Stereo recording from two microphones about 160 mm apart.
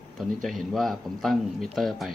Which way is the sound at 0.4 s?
Centre (ahead or behind).